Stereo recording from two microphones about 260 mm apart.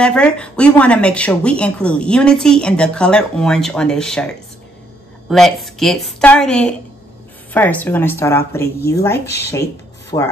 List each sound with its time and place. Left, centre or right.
0.0 s speech: centre
10.1 s speech: left